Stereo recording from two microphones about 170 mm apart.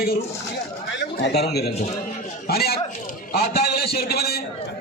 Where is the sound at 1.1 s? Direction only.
75° left (ahead or behind).